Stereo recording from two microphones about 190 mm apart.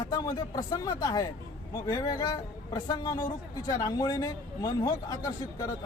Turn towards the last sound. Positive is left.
turn(degrees=20)  # may be behind; listen again after turning